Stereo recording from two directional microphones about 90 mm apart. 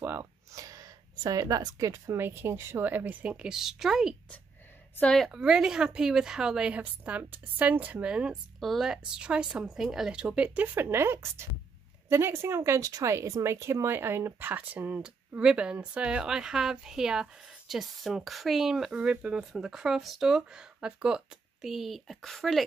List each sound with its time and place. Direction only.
0.0 s speech: 30° right (ahead or behind)
2.1 s speech: 25° right (ahead or behind); by 4.1 s 5° right (ahead or behind)
5.0 s speech: 5° left (ahead or behind)
5.3 s a woman's voice: 10° right (ahead or behind)